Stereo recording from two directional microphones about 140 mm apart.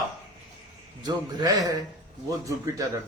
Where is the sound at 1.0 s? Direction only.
25° right (ahead or behind).